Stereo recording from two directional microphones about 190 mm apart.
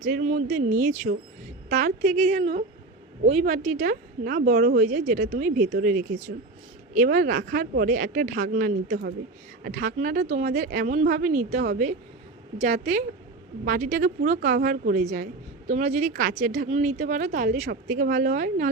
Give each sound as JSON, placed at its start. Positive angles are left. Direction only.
{"t": 0.0, "sound": "speech", "side_deg": -40}
{"t": 8.4, "sound": "a woman's voice", "side_deg": -55}